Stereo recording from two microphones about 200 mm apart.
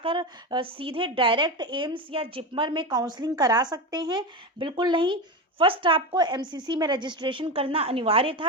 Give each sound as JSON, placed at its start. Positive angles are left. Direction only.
{"t": 0.0, "sound": "a woman's voice", "side_deg": -25}